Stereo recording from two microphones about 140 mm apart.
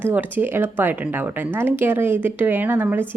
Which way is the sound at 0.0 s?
15° right (ahead or behind).